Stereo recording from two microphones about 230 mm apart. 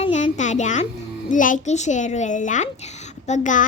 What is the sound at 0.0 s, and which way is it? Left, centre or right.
Music, left.